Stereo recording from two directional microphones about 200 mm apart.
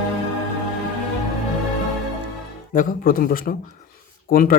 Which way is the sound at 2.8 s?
45° left (ahead or behind).